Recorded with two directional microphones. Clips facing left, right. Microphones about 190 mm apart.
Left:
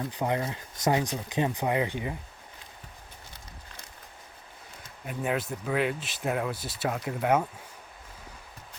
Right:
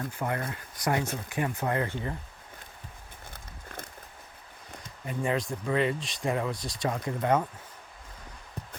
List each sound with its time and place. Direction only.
0.1 s speech: 20° left (ahead or behind)
3.2 s a sound: 55° right (ahead or behind)
5.0 s speech: 5° left (ahead or behind)